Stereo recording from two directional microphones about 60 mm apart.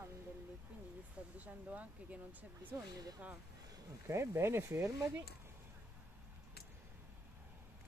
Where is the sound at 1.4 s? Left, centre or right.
Right.